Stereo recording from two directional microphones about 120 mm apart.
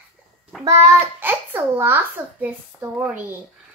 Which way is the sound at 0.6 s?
25° right (ahead or behind).